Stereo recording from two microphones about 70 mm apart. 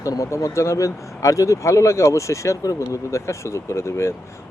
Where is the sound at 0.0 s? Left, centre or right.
Left.